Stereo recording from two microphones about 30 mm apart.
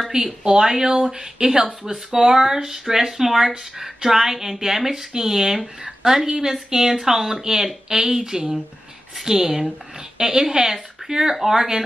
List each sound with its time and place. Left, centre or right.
0.4 s speech: right